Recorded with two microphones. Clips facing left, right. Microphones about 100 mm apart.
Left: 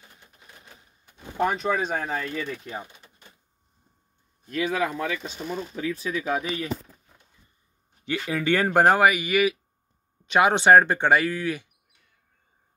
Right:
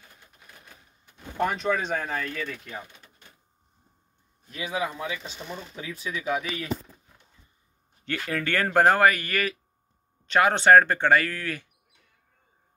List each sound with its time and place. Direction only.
1.1 s speech: 10° left (ahead or behind)
4.5 s speech: 15° right (ahead or behind)
4.7 s speech: 60° left (ahead or behind)
5.9 s speech: 40° left (ahead or behind)
8.3 s speech: 15° left (ahead or behind)